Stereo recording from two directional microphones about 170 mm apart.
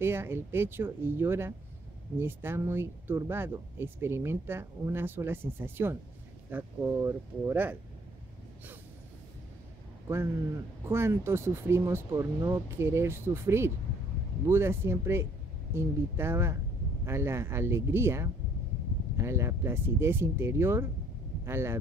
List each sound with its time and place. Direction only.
0.0 s speech: 15° right (ahead or behind)
10.0 s speech: 15° right (ahead or behind)